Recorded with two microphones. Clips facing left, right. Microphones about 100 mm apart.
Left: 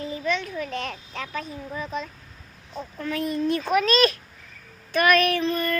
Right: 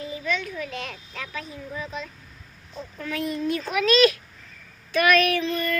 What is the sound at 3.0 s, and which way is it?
A child's voice, 35° left (ahead or behind).